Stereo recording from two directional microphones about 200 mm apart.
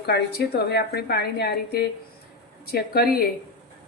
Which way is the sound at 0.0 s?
55° left (ahead or behind).